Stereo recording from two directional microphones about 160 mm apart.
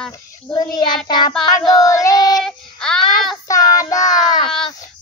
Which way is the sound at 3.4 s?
20° left (ahead or behind).